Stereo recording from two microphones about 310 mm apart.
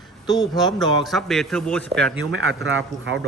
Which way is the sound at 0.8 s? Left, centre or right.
Centre.